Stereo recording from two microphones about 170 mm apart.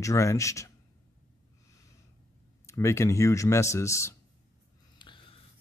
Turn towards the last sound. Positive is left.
turn(degrees=30)  # may be behind; listen again after turning